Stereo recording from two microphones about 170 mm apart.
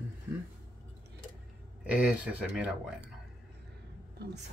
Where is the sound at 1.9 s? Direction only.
5° right (ahead or behind).